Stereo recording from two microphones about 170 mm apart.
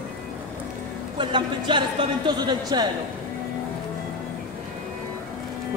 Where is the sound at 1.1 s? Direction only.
25° right (ahead or behind).